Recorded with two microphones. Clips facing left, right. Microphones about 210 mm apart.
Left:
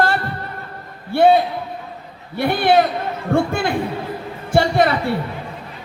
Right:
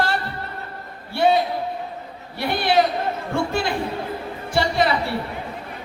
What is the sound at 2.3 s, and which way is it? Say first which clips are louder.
A man's voice: left 4 dB; 55° left (ahead or behind).